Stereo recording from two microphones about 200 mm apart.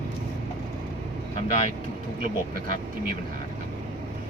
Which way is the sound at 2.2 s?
45° right (ahead or behind).